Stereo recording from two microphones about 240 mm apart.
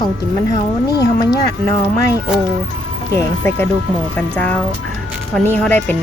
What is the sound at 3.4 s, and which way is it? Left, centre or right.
Speech, centre.